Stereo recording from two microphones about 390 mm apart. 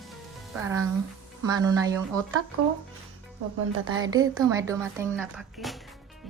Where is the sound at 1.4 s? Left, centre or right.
Centre.